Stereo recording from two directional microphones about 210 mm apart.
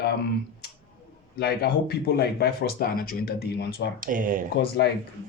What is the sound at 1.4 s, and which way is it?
Speech, 50° left (ahead or behind).